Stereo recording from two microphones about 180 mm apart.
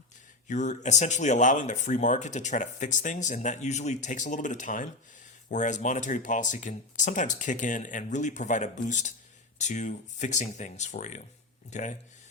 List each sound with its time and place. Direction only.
0.4 s speech: 40° left (ahead or behind)